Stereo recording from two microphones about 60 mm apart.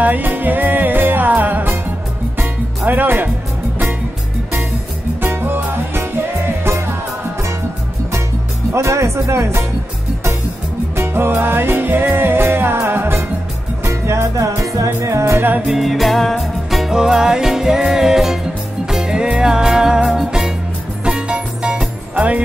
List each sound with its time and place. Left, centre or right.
0.0 s music: right
5.2 s music: right
8.7 s music: right
11.0 s music: right
13.8 s music: right
15.6 s music: centre; by 22.4 s right